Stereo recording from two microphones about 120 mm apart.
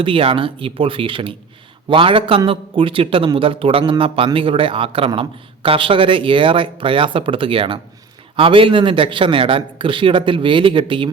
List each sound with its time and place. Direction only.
0.0 s a man's voice: 50° right (ahead or behind)